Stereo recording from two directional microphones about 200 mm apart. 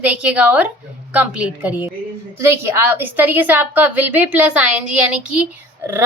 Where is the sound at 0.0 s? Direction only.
5° right (ahead or behind).